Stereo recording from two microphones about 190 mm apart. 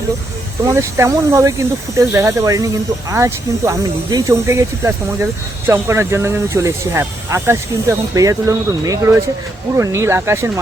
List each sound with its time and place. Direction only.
0.6 s speech: 15° right (ahead or behind)